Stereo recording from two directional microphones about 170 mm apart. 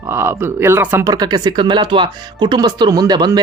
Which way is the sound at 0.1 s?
15° right (ahead or behind).